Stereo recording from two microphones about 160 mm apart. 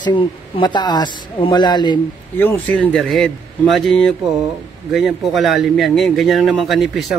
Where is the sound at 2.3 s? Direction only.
10° left (ahead or behind).